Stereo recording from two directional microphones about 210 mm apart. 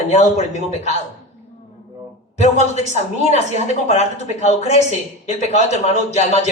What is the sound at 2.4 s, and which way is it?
A woman's voice, 30° left (ahead or behind).